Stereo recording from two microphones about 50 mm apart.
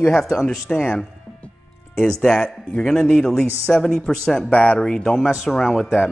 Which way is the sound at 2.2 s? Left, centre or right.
Centre.